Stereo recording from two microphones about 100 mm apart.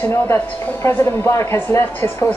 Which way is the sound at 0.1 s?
25° left (ahead or behind).